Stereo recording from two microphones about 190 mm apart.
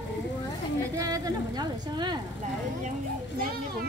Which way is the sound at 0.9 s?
20° right (ahead or behind).